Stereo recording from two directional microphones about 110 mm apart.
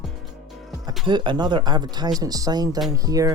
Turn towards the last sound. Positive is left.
turn(degrees=-35)  # may be behind; listen again after turning